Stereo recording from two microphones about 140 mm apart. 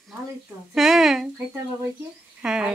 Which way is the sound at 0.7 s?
Centre (ahead or behind).